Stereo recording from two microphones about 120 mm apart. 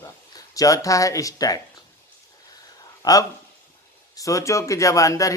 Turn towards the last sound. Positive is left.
turn(degrees=25)  # may be behind; listen again after turning